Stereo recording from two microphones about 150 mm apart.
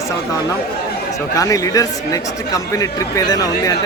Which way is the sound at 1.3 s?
20° left (ahead or behind).